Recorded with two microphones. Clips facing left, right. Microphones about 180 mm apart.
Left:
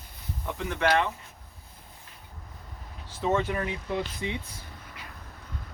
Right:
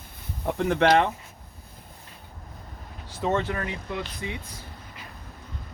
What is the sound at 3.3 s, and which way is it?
Speech, 10° left (ahead or behind).